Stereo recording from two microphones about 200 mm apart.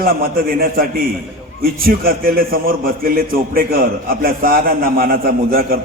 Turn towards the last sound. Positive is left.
turn(degrees=-45)  # may be behind; listen again after turning